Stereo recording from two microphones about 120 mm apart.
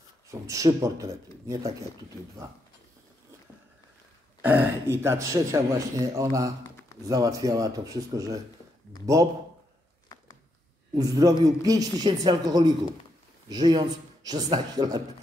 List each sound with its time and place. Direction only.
0.3 s a man's voice: 25° right (ahead or behind)
4.4 s a man's voice: 15° right (ahead or behind)
11.0 s speech: 30° right (ahead or behind)